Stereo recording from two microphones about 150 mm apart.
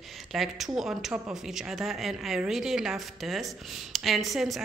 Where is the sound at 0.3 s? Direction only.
Centre (ahead or behind).